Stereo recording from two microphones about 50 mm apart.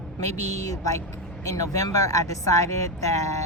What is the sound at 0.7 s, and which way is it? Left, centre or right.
Speech, left.